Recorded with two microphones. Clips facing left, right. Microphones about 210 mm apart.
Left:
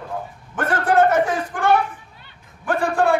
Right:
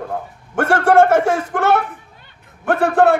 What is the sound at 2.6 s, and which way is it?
Speech, 60° right (ahead or behind).